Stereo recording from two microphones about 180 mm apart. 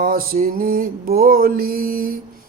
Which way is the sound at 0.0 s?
55° right (ahead or behind).